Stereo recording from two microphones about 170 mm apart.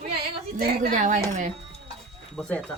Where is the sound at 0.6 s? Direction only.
65° right (ahead or behind).